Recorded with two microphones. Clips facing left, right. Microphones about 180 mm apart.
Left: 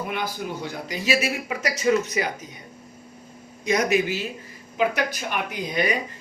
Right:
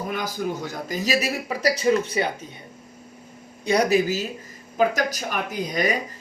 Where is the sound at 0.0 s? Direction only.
40° right (ahead or behind).